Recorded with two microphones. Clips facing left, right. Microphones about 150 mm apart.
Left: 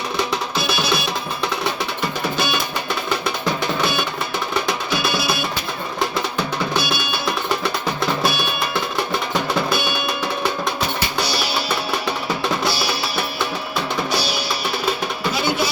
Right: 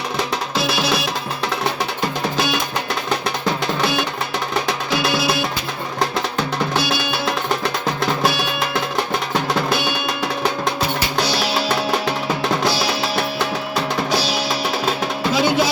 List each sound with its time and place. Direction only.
0.5 s music: 90° right
4.9 s music: 90° right
6.7 s music: 90° right
11.2 s music: 90° right
12.7 s music: 90° right
14.2 s music: 90° right